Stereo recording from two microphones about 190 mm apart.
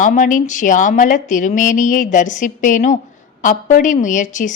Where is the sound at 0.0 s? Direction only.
45° left (ahead or behind).